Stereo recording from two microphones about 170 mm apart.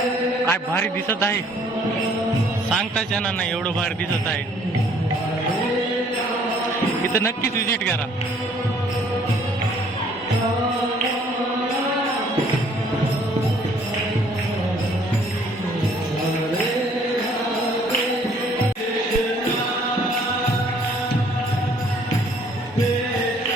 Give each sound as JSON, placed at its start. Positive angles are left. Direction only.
{"t": 0.4, "sound": "a man's voice", "side_deg": 10}
{"t": 7.1, "sound": "a man's voice", "side_deg": 15}